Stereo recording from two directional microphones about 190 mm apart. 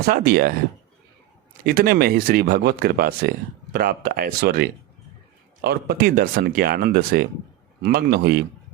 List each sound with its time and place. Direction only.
0.0 s speech: 50° right (ahead or behind)
1.6 s speech: 50° right (ahead or behind)